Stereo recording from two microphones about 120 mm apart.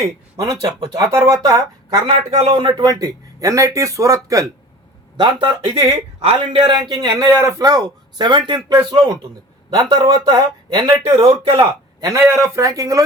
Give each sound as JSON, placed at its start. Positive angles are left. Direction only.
{"t": 0.0, "sound": "a man's voice", "side_deg": -30}
{"t": 2.3, "sound": "speech", "side_deg": -65}
{"t": 2.6, "sound": "speech", "side_deg": -40}
{"t": 5.1, "sound": "a man's voice", "side_deg": -40}
{"t": 11.9, "sound": "a man's voice", "side_deg": -30}